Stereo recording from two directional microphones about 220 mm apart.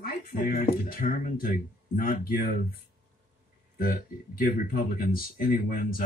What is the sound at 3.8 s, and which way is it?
Speech, 40° left (ahead or behind).